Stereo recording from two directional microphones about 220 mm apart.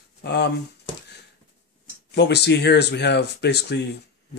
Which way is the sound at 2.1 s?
50° left (ahead or behind).